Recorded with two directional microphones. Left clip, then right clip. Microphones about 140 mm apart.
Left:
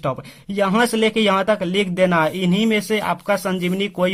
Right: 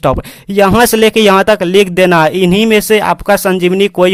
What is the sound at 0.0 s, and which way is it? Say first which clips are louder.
Speech: right 12 dB; 55° right (ahead or behind).